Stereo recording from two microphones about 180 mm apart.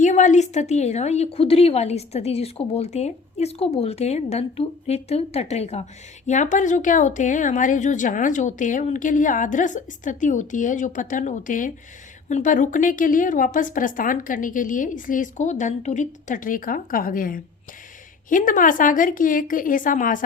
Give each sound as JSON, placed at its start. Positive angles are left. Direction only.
{"t": 0.0, "sound": "a woman's voice", "side_deg": 45}